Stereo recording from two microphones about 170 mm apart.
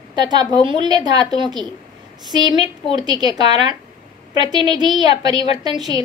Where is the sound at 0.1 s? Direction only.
25° right (ahead or behind).